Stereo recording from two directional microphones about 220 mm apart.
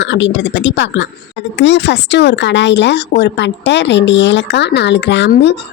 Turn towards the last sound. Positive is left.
turn(degrees=50)  # may be behind; listen again after turning